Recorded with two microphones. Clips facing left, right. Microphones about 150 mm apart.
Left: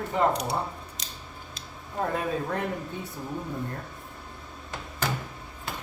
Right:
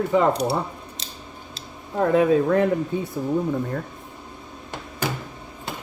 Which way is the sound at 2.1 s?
90° right.